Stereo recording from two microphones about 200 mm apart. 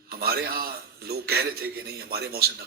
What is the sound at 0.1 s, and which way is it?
A man's voice, 50° right (ahead or behind).